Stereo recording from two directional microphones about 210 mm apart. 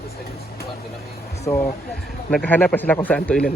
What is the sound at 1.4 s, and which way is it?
A man's voice, 10° left (ahead or behind).